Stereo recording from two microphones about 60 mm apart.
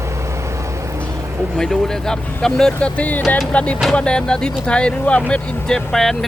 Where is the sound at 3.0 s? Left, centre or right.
Left.